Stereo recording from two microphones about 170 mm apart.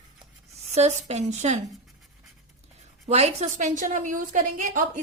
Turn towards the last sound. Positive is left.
turn(degrees=-50)  # may be behind; listen again after turning